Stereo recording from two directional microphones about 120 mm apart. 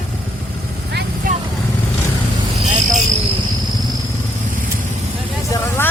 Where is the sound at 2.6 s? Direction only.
90° right.